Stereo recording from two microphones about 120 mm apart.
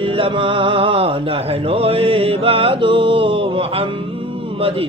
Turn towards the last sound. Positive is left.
turn(degrees=-50)  # may be behind; listen again after turning